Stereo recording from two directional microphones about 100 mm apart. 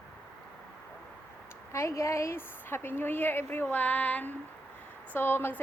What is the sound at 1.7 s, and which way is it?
A woman's voice, 30° left (ahead or behind).